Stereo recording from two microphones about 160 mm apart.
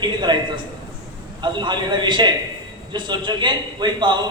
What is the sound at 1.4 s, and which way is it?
A man's voice, 30° right (ahead or behind).